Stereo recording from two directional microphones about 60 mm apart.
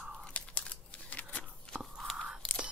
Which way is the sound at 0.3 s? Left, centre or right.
Left.